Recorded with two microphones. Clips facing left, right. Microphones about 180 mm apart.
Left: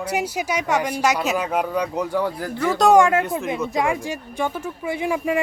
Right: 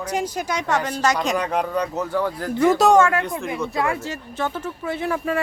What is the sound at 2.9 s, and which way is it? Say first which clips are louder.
Speech: left 1 dB; 15° left (ahead or behind).